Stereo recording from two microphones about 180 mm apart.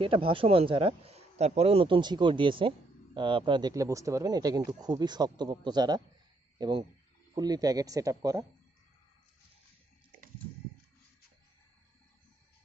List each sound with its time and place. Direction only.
0.0 s speech: 30° right (ahead or behind)